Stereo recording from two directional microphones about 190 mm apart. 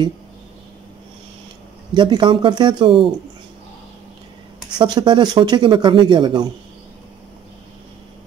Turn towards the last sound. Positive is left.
turn(degrees=-25)  # may be behind; listen again after turning